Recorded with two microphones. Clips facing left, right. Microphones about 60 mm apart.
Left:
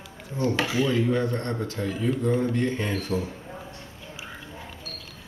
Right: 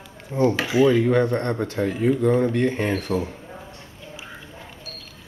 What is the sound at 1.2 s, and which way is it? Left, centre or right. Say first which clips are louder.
Speech: right 5 dB; right.